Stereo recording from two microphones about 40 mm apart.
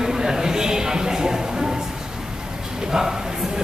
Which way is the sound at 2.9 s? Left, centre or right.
Centre.